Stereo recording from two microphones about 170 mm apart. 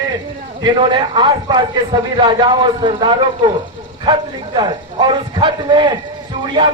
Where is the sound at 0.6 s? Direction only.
25° right (ahead or behind).